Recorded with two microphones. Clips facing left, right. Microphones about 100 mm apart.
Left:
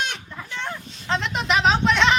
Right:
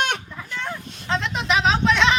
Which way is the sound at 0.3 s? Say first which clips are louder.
Right 1 dB; centre (ahead or behind).